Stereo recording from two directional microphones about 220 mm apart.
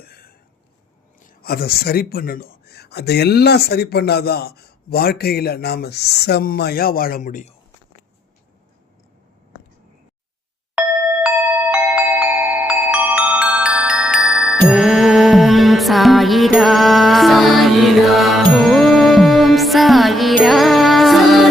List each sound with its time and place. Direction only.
0.0 s a sound: 45° left (ahead or behind)
1.2 s a man's voice: 40° left (ahead or behind)
11.7 s glockenspiel: 5° right (ahead or behind)
12.9 s music: 5° right (ahead or behind)